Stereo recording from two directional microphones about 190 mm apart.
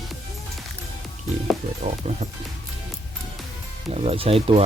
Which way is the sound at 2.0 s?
35° right (ahead or behind).